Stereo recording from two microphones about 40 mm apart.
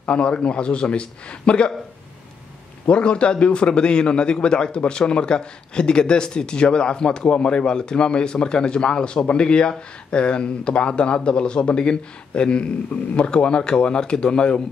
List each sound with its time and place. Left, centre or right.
0.0 s a man's voice: left
2.9 s a man's voice: left